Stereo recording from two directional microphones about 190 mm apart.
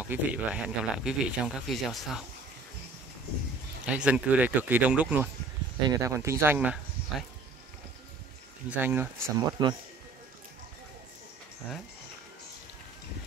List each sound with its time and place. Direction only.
0.0 s speech: 10° right (ahead or behind)
3.8 s speech: 5° right (ahead or behind)
8.6 s speech: 10° right (ahead or behind)